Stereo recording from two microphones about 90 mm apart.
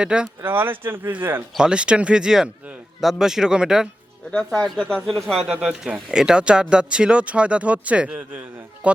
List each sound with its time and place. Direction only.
0.0 s speech: 10° right (ahead or behind)
0.4 s speech: 25° right (ahead or behind)
1.5 s speech: 10° right (ahead or behind)
4.3 s speech: 10° left (ahead or behind); by 9.0 s 15° right (ahead or behind)